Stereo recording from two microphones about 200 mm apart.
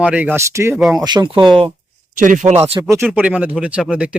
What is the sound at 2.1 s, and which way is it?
Speech, 40° right (ahead or behind).